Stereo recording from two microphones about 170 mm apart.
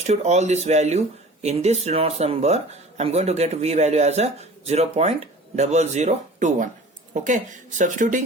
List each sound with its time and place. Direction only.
0.1 s a man's voice: 40° right (ahead or behind)